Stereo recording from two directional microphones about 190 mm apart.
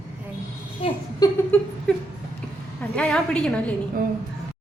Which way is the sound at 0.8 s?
30° left (ahead or behind).